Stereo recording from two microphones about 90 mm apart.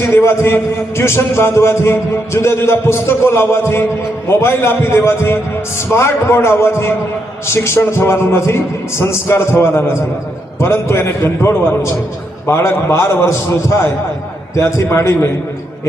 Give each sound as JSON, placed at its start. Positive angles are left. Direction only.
{"t": 0.0, "sound": "a man's voice", "side_deg": 30}